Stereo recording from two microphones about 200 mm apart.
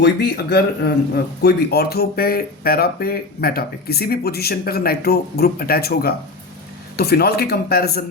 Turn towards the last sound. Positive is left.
turn(degrees=50)  # may be behind; listen again after turning